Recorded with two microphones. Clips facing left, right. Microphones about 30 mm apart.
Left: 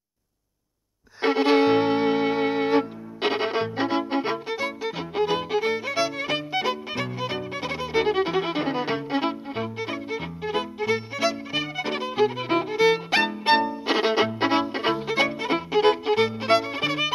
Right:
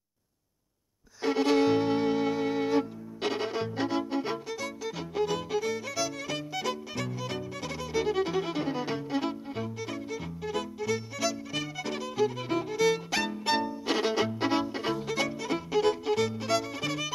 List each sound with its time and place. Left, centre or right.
1.2 s music: left